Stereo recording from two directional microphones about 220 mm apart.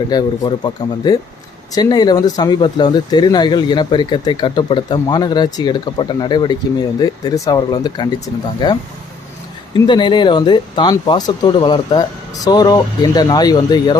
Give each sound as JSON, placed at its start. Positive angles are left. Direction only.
{"t": 0.1, "sound": "speech", "side_deg": 20}